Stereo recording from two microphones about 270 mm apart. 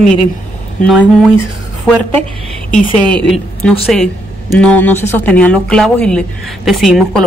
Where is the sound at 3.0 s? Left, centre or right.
Centre.